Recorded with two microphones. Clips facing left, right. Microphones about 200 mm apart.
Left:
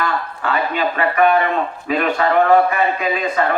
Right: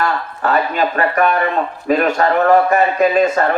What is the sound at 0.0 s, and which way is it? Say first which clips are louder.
A man's voice: right 3 dB; 45° right (ahead or behind).